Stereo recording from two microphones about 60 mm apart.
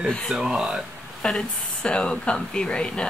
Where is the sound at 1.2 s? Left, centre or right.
Centre.